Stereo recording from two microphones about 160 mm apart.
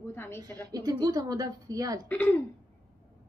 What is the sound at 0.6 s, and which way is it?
Speech, 25° right (ahead or behind).